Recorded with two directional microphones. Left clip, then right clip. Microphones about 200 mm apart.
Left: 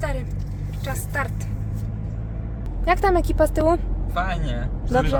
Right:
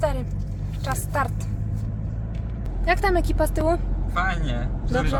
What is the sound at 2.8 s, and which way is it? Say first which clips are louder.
Speech: left 2 dB; 20° left (ahead or behind).